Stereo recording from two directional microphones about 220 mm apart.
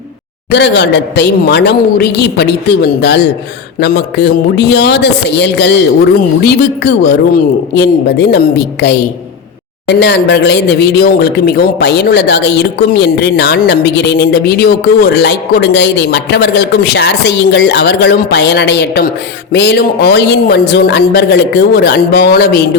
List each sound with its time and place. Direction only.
0.5 s speech: 50° left (ahead or behind)